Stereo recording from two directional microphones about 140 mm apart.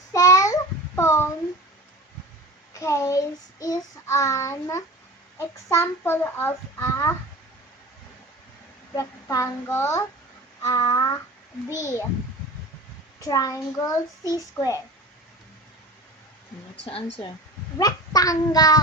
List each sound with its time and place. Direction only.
0.1 s child singing: 25° left (ahead or behind)
2.7 s child singing: 20° left (ahead or behind)
5.4 s a child's voice: 20° left (ahead or behind)
9.0 s speech: 25° left (ahead or behind)
11.7 s a child's voice: 60° left (ahead or behind)
13.2 s speech: 25° left (ahead or behind)
16.8 s speech: 35° left (ahead or behind)
17.7 s child singing: 25° left (ahead or behind)